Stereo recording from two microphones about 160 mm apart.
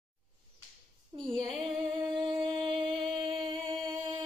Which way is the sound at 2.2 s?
30° right (ahead or behind).